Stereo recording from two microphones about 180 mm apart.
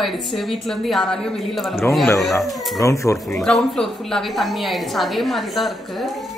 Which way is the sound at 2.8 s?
15° left (ahead or behind).